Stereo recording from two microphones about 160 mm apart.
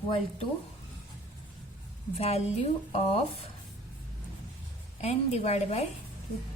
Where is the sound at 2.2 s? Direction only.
40° left (ahead or behind).